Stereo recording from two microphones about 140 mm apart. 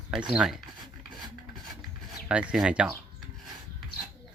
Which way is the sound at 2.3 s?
5° right (ahead or behind).